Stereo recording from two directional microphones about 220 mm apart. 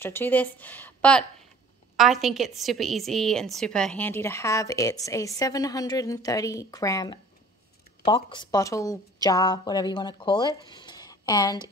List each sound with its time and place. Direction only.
0.0 s a woman's voice: 10° left (ahead or behind)